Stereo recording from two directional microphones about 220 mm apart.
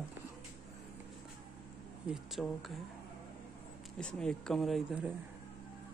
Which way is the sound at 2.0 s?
Centre (ahead or behind).